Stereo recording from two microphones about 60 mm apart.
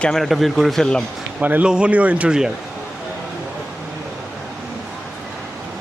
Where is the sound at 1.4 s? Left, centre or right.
Right.